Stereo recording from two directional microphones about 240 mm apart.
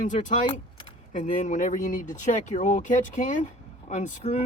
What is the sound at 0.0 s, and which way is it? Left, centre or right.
Speech, left.